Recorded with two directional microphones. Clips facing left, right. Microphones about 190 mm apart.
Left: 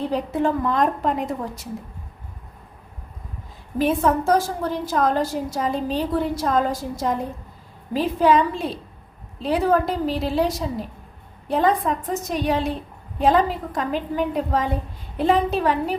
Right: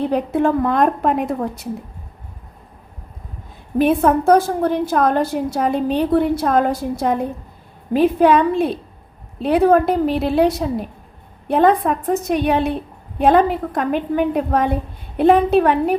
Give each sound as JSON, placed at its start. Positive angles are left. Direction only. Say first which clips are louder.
{"t": 0.1, "sound": "a woman's voice", "louder": "right 5 dB", "side_deg": -60}
{"t": 3.8, "sound": "a woman's voice", "louder": "right 5 dB", "side_deg": -60}